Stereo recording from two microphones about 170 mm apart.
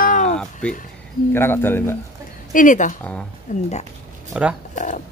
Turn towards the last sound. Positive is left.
turn(degrees=45)  # may be behind; listen again after turning